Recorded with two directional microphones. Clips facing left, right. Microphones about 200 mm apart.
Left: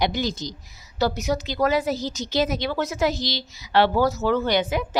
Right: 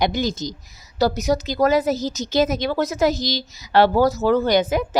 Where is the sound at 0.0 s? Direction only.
45° right (ahead or behind).